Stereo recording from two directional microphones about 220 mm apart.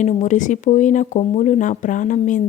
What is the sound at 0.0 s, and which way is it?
Speech, 35° left (ahead or behind).